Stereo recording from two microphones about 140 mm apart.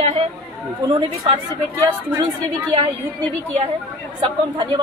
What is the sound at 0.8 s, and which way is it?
Speech, 35° right (ahead or behind).